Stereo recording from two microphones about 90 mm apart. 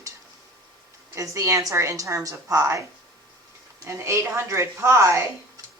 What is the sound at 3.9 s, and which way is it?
A woman's voice, 30° right (ahead or behind).